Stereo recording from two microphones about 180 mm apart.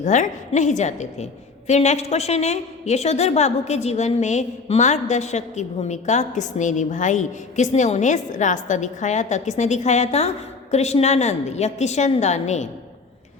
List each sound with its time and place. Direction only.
0.0 s a woman's voice: 40° left (ahead or behind)